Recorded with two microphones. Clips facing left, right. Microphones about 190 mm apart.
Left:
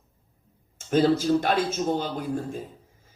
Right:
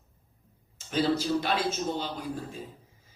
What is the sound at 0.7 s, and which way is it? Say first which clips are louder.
Speech: left 6 dB; 50° left (ahead or behind).